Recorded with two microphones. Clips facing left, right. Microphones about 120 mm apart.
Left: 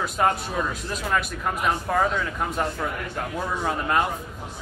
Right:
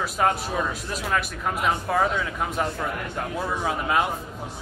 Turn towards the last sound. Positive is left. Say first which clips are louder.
# even
turn(degrees=0)  # may be behind; listen again after turning